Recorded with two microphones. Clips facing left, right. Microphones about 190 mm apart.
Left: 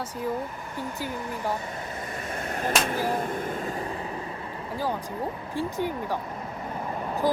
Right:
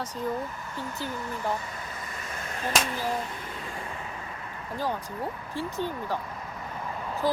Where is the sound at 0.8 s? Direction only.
15° left (ahead or behind).